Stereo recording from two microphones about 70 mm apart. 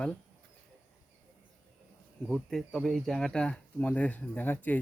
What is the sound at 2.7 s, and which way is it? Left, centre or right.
Speech, centre.